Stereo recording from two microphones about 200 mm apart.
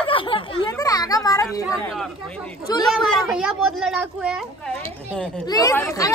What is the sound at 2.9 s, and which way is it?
A woman's voice, centre (ahead or behind).